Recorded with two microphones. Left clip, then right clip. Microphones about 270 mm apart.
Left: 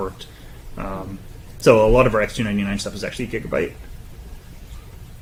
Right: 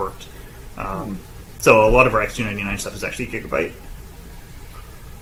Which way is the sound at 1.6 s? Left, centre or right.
Right.